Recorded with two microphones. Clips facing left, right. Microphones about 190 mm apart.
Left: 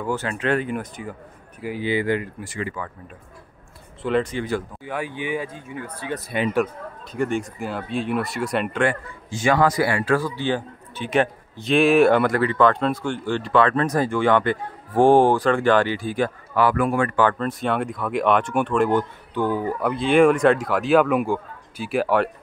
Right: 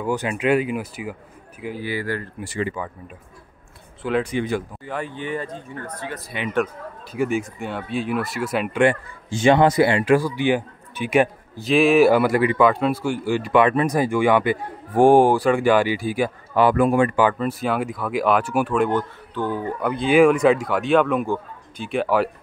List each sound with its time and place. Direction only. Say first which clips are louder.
0.0 s a man's voice: right 2 dB; 15° right (ahead or behind)
1.8 s speech: left 5 dB; 20° left (ahead or behind)
2.4 s speech: right 4 dB; 35° right (ahead or behind)
4.0 s speech: left 1 dB; 5° right (ahead or behind)
4.3 s a man's voice: right 2 dB; 15° right (ahead or behind)
4.8 s speech: left 1 dB; 5° left (ahead or behind)
6.1 s speech: left 8 dB; 40° left (ahead or behind)
6.5 s speech: even; centre (ahead or behind)
9.3 s a man's voice: right 4 dB; 25° right (ahead or behind); by 18.9 s 5° right (ahead or behind)
18.9 s speech: left 2 dB; 15° left (ahead or behind)
19.8 s speech: right 1 dB; centre (ahead or behind)